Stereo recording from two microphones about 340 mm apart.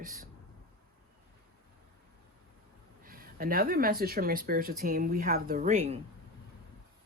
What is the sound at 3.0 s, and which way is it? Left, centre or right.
Speech, right.